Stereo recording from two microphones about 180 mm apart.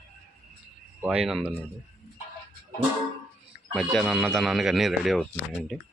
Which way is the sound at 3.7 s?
Centre (ahead or behind).